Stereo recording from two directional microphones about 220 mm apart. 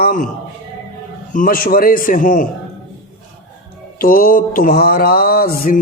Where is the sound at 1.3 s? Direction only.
40° left (ahead or behind).